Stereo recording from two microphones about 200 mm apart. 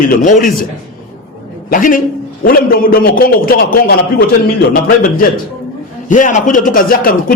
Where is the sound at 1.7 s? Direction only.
45° left (ahead or behind).